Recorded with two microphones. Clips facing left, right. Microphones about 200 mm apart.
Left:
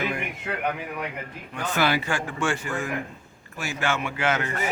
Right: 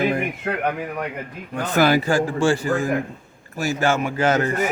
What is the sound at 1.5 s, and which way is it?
A man's voice, 40° right (ahead or behind).